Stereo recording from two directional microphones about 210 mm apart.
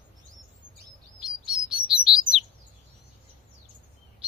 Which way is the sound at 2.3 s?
30° right (ahead or behind).